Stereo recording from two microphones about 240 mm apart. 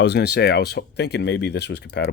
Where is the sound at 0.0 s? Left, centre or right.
Left.